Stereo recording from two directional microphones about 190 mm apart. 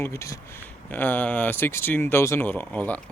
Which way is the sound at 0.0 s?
15° left (ahead or behind).